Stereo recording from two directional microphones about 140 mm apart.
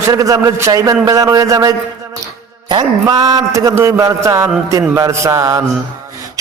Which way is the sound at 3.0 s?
30° right (ahead or behind).